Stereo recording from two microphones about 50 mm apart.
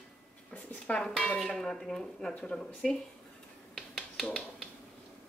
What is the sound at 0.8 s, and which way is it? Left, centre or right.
Speech, centre.